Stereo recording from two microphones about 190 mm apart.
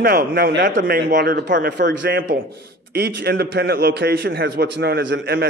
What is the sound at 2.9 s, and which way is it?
A man's voice, 55° right (ahead or behind).